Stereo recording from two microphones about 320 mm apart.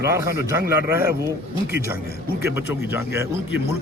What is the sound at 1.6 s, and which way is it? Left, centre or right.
Speech, left.